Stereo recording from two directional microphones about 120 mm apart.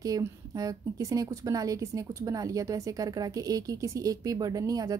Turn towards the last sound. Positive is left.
turn(degrees=-30)  # may be behind; listen again after turning